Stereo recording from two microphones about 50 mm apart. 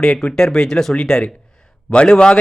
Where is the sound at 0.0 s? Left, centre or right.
Centre.